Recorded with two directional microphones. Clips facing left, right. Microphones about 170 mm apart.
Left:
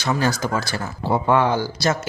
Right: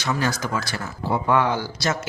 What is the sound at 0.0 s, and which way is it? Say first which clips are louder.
Speech: left 3 dB; 30° left (ahead or behind).